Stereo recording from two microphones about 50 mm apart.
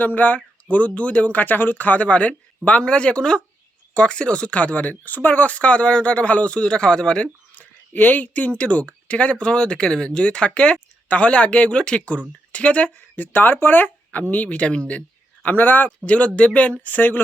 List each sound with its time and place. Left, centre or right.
0.0 s speech: left
7.5 s speech: left
13.1 s speech: left
15.4 s speech: left
16.0 s speech: left
16.8 s speech: left